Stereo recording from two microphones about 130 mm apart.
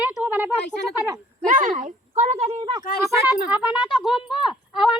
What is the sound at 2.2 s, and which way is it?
Speech, 55° right (ahead or behind).